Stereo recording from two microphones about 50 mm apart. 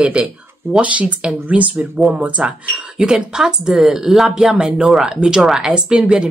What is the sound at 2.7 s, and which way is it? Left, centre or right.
Speech, centre.